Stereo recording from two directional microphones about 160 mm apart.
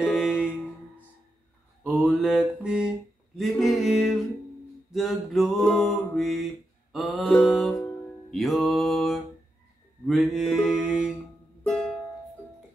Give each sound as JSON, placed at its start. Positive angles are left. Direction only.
{"t": 0.1, "sound": "mantra", "side_deg": -5}
{"t": 1.9, "sound": "mantra", "side_deg": 0}
{"t": 3.3, "sound": "a sound", "side_deg": 0}
{"t": 7.7, "sound": "music", "side_deg": 20}
{"t": 8.3, "sound": "a sound", "side_deg": 0}
{"t": 10.0, "sound": "mantra", "side_deg": 0}